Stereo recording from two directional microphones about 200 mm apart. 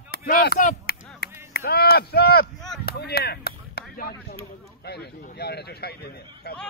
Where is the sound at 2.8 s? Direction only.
50° left (ahead or behind).